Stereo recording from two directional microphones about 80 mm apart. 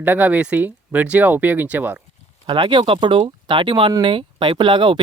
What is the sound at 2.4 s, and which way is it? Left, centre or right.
Speech, right.